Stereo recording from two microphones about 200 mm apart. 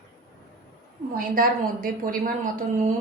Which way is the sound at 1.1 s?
45° right (ahead or behind).